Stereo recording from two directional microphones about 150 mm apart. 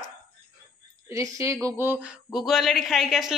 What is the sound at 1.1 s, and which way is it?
Speech, 20° right (ahead or behind).